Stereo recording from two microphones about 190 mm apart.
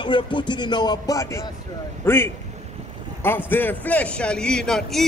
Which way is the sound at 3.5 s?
10° left (ahead or behind).